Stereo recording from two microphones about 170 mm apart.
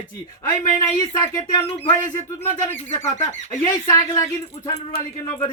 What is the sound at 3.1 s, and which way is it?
Speech, 45° left (ahead or behind).